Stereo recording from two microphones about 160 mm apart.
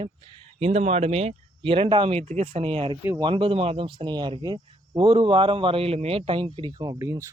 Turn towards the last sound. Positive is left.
turn(degrees=-20)  # may be behind; listen again after turning